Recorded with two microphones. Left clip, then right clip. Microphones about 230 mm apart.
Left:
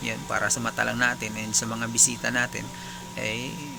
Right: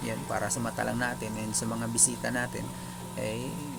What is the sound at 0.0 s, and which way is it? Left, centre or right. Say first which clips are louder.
Speech: left 5 dB; centre.